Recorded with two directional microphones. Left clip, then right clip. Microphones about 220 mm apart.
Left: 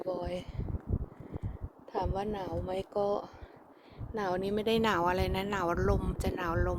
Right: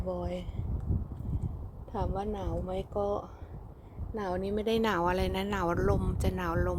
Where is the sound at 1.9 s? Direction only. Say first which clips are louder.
Left 1 dB; 5° left (ahead or behind).